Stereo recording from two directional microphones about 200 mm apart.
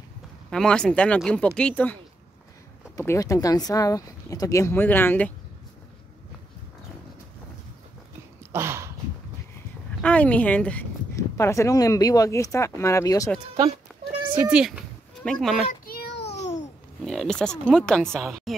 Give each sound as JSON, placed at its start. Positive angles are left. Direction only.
{"t": 0.5, "sound": "speech", "side_deg": 5}
{"t": 3.0, "sound": "speech", "side_deg": 15}
{"t": 8.5, "sound": "a sound", "side_deg": -10}
{"t": 10.0, "sound": "speech", "side_deg": 5}
{"t": 14.3, "sound": "speech", "side_deg": -5}
{"t": 15.8, "sound": "child singing", "side_deg": 50}
{"t": 16.3, "sound": "babbling", "side_deg": 35}
{"t": 17.0, "sound": "speech", "side_deg": 0}